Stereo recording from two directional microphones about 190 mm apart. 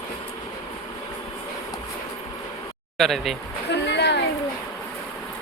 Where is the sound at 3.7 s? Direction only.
65° left (ahead or behind).